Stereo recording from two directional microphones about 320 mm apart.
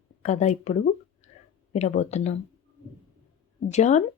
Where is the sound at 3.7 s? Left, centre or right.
Left.